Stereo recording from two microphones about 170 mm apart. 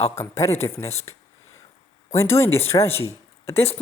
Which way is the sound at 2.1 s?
15° left (ahead or behind).